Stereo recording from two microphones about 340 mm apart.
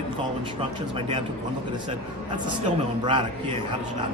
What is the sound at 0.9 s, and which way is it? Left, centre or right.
Speech, centre.